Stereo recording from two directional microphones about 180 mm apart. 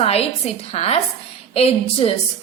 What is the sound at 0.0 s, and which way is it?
A woman's voice, 35° left (ahead or behind).